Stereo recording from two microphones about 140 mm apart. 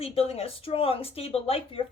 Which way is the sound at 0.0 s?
45° left (ahead or behind).